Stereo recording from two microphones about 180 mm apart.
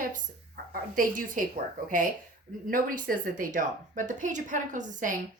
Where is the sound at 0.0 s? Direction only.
55° right (ahead or behind).